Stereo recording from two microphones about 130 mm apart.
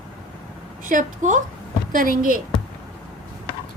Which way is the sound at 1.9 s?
90° right.